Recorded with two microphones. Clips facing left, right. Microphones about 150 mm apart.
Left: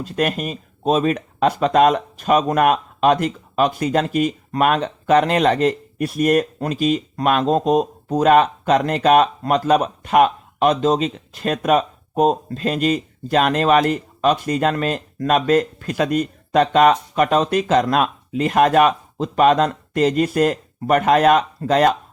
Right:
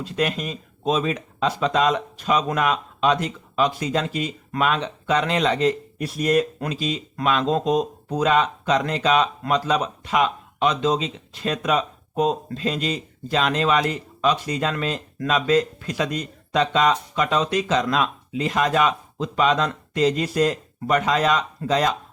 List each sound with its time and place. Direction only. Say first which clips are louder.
0.0 s speech: left 3 dB; 50° left (ahead or behind)